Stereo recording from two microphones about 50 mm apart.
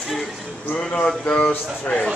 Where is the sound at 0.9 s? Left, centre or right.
Left.